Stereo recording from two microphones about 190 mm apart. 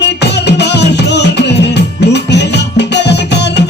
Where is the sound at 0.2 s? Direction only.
65° left (ahead or behind).